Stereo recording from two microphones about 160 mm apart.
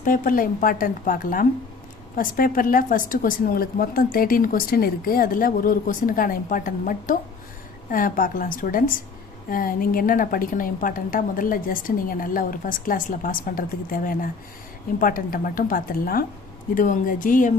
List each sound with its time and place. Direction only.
0.0 s speech: 60° left (ahead or behind)